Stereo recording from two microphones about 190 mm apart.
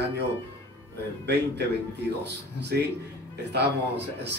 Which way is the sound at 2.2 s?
60° right (ahead or behind).